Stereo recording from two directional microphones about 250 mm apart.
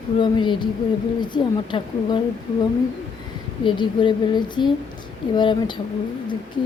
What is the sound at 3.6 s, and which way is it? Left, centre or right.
A woman's voice, centre.